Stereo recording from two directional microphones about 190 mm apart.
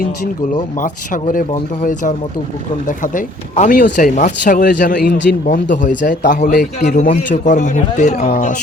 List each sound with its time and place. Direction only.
0.8 s a man's voice: 45° left (ahead or behind)